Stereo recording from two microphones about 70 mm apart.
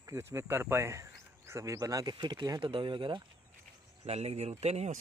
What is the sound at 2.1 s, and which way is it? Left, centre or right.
Speech, right.